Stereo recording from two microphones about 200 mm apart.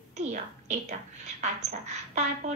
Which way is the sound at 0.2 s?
35° right (ahead or behind).